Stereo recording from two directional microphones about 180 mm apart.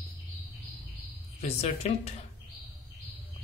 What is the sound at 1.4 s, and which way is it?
Speech, 35° left (ahead or behind).